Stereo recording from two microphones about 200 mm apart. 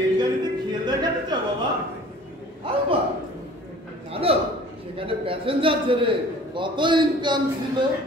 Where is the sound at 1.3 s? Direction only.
20° right (ahead or behind).